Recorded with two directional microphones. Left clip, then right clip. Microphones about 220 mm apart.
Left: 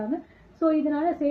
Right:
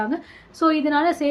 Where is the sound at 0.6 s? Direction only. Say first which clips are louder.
Right 5 dB; 25° right (ahead or behind).